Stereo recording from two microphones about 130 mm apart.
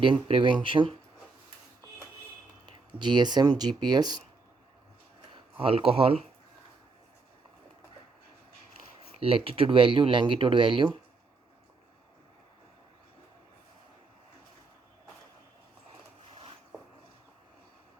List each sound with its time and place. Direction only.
0.0 s speech: 40° right (ahead or behind)
2.6 s speech: 35° right (ahead or behind)
5.3 s speech: 45° right (ahead or behind)
9.2 s speech: 45° right (ahead or behind)